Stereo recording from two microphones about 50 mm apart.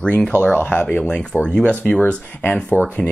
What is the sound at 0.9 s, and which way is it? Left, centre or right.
Speech, left.